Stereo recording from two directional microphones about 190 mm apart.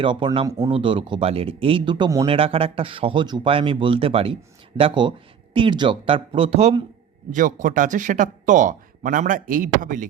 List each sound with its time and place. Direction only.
0.0 s speech: 25° right (ahead or behind)
7.3 s speech: 45° right (ahead or behind)